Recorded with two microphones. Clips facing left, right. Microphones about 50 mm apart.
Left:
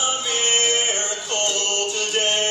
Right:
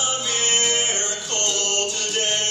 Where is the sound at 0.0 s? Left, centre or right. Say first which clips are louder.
Left 2 dB; centre.